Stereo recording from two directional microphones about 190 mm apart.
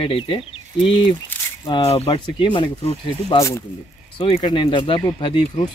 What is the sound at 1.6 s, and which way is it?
Speech, 25° left (ahead or behind).